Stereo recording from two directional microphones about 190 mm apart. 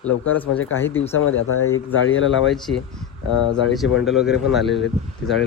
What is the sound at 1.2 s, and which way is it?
Speech, 90° left.